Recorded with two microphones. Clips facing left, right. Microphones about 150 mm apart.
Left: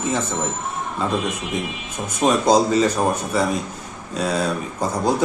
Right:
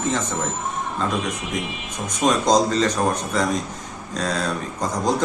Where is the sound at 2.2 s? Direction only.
5° left (ahead or behind).